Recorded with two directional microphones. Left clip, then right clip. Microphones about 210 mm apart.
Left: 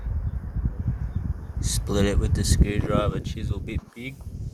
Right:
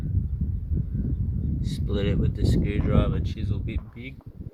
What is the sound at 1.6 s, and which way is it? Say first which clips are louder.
Speech: left 5 dB; centre (ahead or behind).